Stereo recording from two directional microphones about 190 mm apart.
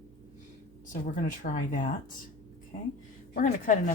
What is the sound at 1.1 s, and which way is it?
Speech, 45° left (ahead or behind).